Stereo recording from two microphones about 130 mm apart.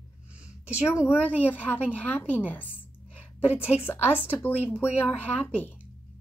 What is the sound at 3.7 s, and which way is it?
Speech, 55° left (ahead or behind).